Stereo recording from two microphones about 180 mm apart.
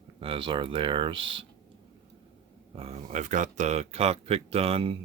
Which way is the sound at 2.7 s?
35° right (ahead or behind).